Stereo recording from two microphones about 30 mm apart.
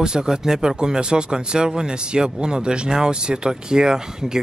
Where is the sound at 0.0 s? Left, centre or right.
Right.